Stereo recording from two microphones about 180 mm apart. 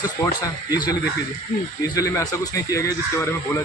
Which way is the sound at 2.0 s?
15° left (ahead or behind).